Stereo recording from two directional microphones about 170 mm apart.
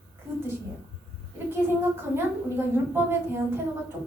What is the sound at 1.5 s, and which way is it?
A woman's voice, 15° right (ahead or behind).